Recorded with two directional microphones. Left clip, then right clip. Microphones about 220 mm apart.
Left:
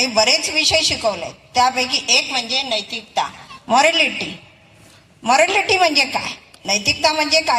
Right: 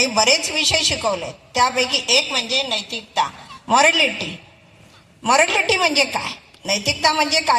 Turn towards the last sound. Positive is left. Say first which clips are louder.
# left 1 dB
turn(degrees=15)  # may be behind; listen again after turning